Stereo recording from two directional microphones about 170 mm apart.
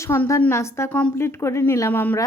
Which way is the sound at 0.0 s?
15° left (ahead or behind).